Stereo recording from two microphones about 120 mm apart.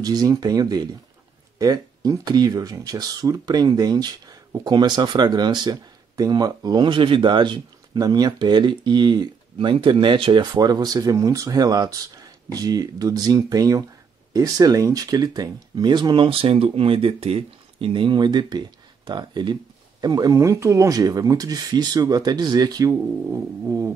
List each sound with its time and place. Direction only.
0.0 s speech: 35° right (ahead or behind)